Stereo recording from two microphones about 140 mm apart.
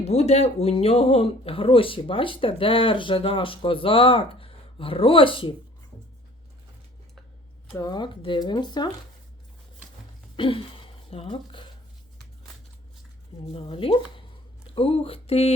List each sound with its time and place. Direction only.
0.0 s speech: 50° left (ahead or behind)
7.7 s speech: 25° left (ahead or behind)
10.3 s speech: 35° left (ahead or behind)
13.5 s speech: 40° left (ahead or behind)
14.8 s a sound: 45° left (ahead or behind)